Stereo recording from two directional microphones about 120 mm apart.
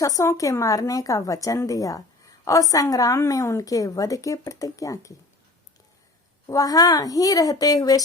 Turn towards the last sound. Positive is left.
turn(degrees=30)  # may be behind; listen again after turning